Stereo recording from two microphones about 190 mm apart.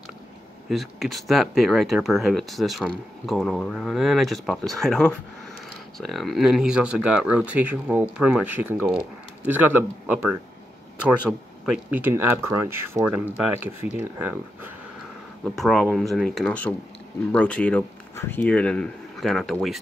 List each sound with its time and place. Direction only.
0.7 s speech: centre (ahead or behind)
15.4 s speech: centre (ahead or behind)